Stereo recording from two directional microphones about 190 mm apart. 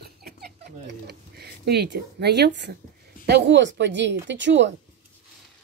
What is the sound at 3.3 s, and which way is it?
A woman's voice, 65° right (ahead or behind).